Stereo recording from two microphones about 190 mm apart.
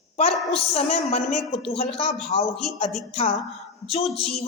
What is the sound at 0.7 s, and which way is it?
A woman's voice, 35° left (ahead or behind).